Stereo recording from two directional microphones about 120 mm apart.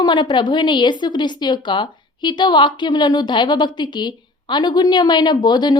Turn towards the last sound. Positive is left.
turn(degrees=35)  # may be behind; listen again after turning